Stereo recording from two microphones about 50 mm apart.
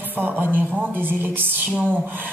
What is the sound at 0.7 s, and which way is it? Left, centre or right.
Speech, right.